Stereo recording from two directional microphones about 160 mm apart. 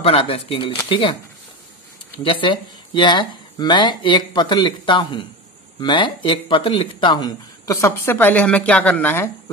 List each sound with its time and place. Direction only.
0.0 s speech: 35° left (ahead or behind)
2.4 s speech: 30° left (ahead or behind); by 9.3 s 10° left (ahead or behind)